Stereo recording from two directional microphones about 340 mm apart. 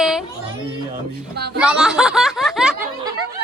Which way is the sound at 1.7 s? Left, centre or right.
Centre.